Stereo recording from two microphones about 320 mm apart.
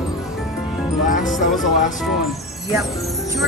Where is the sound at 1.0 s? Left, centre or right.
Left.